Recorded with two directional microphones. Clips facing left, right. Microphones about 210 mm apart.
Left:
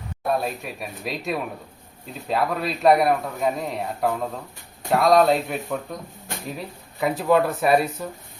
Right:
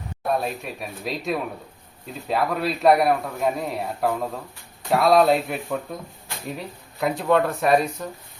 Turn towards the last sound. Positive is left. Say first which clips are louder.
# even
turn(degrees=5)  # may be behind; listen again after turning